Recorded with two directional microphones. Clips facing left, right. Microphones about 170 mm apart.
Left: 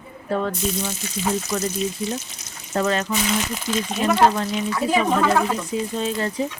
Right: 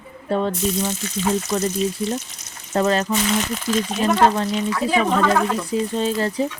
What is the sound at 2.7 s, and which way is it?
Speech, 35° right (ahead or behind).